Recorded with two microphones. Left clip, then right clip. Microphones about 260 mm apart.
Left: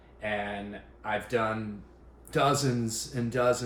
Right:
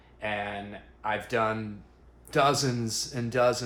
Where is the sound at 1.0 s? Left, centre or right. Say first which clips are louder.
Right 2 dB; right.